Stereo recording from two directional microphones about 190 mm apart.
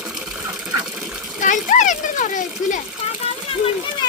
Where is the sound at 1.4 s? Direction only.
40° left (ahead or behind).